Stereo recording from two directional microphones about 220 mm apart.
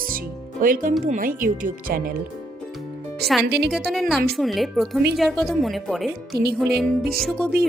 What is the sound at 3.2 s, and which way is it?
Speech, centre (ahead or behind).